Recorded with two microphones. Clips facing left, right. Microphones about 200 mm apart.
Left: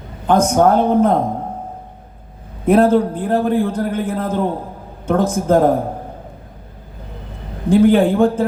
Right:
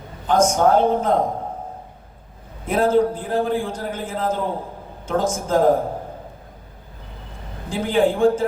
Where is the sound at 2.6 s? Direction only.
60° left (ahead or behind).